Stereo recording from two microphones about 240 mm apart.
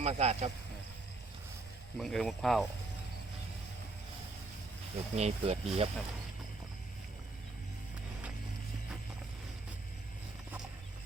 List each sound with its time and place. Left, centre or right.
0.0 s speech: right
2.0 s speech: centre
5.1 s speech: right